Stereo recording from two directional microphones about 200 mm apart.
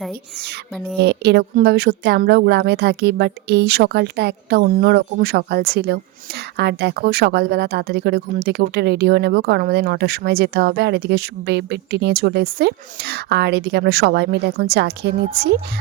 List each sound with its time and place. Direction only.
1.0 s a woman's voice: 55° right (ahead or behind)